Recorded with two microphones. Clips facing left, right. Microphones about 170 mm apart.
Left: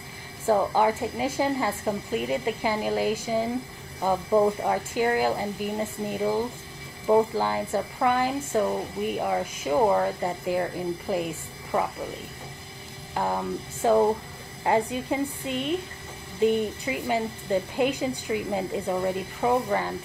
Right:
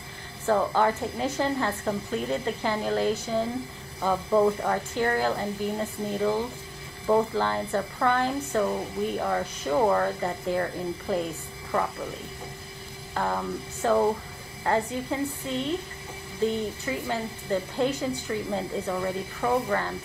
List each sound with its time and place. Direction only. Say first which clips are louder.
0.5 s speech: left 1 dB; 15° left (ahead or behind)
13.1 s speech: left 1 dB; 15° left (ahead or behind)